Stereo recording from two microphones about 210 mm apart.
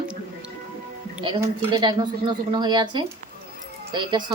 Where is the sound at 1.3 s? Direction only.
20° right (ahead or behind).